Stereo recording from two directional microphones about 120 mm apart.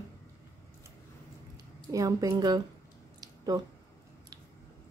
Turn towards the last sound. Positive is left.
turn(degrees=-35)  # may be behind; listen again after turning